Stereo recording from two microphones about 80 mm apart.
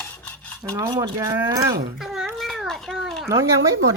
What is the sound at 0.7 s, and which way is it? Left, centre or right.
Speech, right.